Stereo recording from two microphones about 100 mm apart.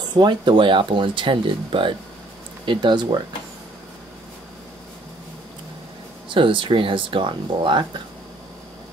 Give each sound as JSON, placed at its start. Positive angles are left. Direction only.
{"t": 0.1, "sound": "speech", "side_deg": -50}
{"t": 6.2, "sound": "speech", "side_deg": -55}